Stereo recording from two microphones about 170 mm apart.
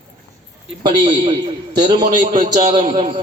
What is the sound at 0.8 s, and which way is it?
A man's voice, 30° right (ahead or behind).